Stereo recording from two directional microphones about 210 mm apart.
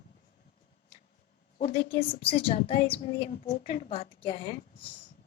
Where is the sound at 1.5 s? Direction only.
30° left (ahead or behind).